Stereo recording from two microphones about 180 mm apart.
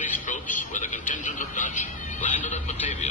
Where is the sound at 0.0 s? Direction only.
45° left (ahead or behind).